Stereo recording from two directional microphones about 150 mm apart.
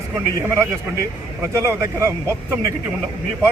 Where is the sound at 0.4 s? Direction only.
20° right (ahead or behind).